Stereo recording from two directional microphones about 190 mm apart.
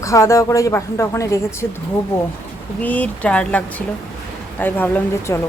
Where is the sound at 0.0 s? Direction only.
15° left (ahead or behind).